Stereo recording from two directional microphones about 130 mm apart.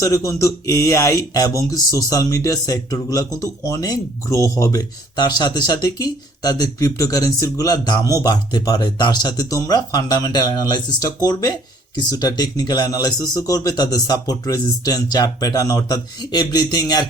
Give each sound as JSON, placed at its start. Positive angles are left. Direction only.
{"t": 0.0, "sound": "speech", "side_deg": 25}